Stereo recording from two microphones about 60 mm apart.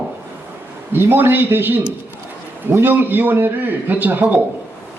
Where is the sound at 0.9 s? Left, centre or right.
Right.